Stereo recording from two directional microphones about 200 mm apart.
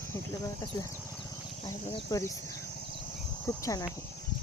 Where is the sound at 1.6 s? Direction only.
15° left (ahead or behind).